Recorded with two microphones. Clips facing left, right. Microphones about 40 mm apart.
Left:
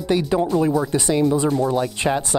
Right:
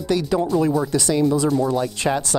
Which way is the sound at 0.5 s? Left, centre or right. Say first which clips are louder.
Even; centre.